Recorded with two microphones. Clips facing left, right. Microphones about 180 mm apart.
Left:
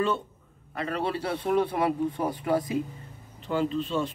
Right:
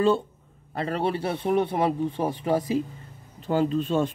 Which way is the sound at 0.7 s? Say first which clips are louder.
Right 3 dB; 30° right (ahead or behind).